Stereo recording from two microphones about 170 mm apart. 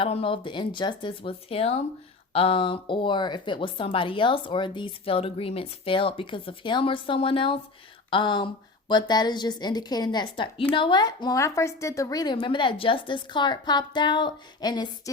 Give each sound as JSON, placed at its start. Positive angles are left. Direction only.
{"t": 0.0, "sound": "a woman's voice", "side_deg": 35}